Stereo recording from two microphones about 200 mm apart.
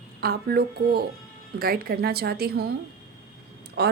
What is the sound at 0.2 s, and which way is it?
A woman's voice, 50° right (ahead or behind).